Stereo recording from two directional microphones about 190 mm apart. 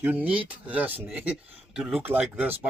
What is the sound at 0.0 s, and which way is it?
Speech, 10° right (ahead or behind).